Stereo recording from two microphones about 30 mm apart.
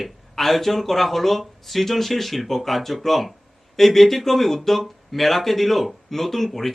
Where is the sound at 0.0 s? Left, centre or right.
Centre.